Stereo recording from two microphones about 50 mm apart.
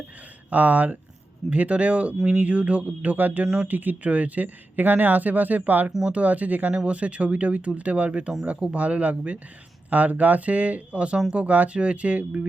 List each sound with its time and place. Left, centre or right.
0.5 s speech: right
3.4 s speech: centre
3.7 s speech: right